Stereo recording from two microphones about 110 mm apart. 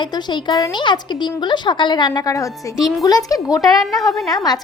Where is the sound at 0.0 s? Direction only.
45° left (ahead or behind).